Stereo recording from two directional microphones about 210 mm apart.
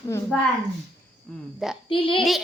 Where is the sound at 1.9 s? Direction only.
25° left (ahead or behind).